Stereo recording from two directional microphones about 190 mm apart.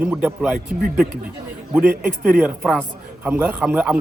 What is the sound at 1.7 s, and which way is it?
A man's voice, 10° right (ahead or behind).